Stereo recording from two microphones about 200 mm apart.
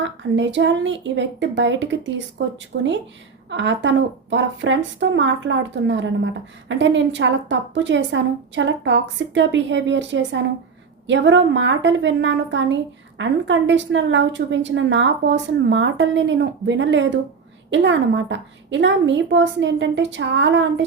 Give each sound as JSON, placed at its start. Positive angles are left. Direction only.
{"t": 0.0, "sound": "speech", "side_deg": -65}